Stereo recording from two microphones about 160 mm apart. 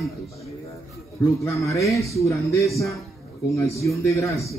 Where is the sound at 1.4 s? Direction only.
20° left (ahead or behind).